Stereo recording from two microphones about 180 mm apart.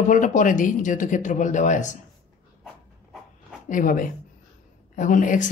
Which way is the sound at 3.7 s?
50° left (ahead or behind).